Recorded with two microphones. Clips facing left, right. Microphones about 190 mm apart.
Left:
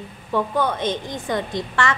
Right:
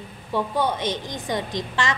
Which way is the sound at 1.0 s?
15° right (ahead or behind).